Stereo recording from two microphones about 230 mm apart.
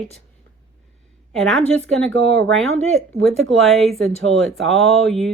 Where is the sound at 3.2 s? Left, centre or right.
Centre.